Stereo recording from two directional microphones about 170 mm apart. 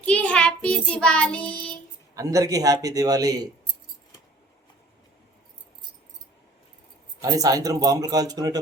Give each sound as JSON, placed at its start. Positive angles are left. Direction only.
{"t": 0.0, "sound": "child singing", "side_deg": 5}
{"t": 2.1, "sound": "speech", "side_deg": -20}
{"t": 7.2, "sound": "speech", "side_deg": -20}